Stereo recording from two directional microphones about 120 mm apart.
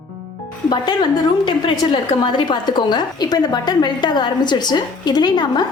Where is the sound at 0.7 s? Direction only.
40° left (ahead or behind).